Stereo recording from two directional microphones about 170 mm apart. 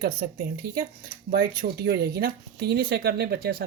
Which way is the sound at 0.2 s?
75° right (ahead or behind).